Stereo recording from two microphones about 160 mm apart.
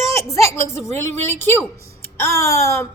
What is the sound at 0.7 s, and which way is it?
A woman's voice, 15° left (ahead or behind).